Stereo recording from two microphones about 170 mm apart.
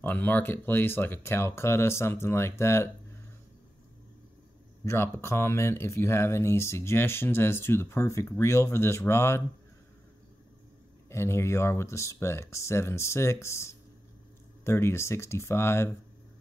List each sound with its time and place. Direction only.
0.0 s speech: 10° left (ahead or behind)
4.8 s speech: 15° left (ahead or behind)
11.1 s speech: 15° left (ahead or behind)